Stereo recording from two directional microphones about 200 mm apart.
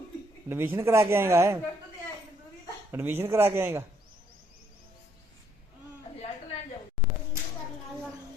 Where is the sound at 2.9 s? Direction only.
10° right (ahead or behind).